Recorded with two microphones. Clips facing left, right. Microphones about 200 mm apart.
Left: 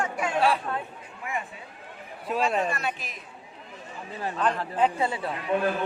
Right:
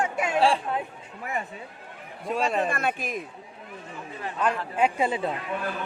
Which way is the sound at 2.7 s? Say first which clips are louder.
Right 4 dB; 50° right (ahead or behind).